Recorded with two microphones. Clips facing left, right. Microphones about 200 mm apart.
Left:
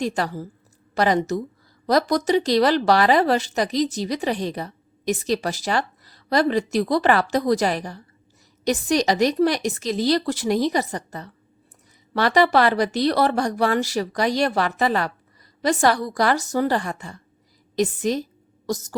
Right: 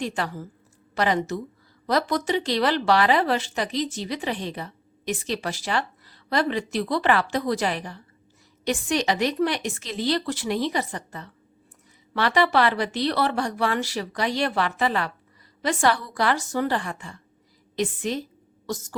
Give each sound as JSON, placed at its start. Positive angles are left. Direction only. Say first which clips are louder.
{"t": 0.0, "sound": "a woman's voice", "louder": "left 4 dB", "side_deg": 40}